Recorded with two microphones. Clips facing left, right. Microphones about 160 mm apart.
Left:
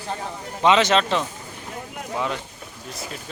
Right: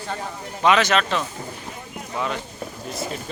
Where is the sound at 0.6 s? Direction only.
25° left (ahead or behind).